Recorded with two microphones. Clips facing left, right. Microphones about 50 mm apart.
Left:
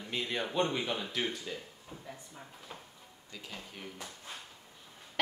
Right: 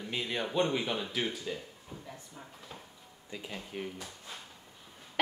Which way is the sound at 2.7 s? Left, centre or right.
Centre.